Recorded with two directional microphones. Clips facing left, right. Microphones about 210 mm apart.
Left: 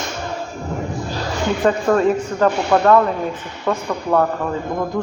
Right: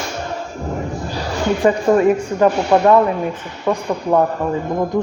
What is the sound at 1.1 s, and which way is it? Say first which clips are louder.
Speech: right 3 dB; 10° right (ahead or behind).